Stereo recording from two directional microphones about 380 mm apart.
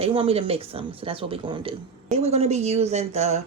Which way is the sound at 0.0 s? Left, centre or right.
Centre.